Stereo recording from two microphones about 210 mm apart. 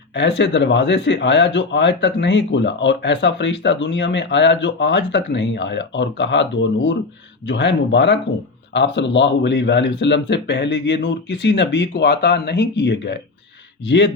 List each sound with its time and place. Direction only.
0.2 s speech: 55° left (ahead or behind)